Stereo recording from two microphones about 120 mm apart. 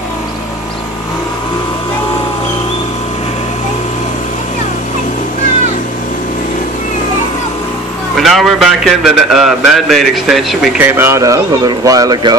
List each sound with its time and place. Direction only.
8.2 s a man's voice: centre (ahead or behind)
11.0 s speech: 25° right (ahead or behind)